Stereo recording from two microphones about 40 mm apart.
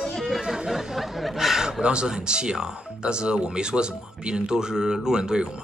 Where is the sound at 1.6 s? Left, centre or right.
Right.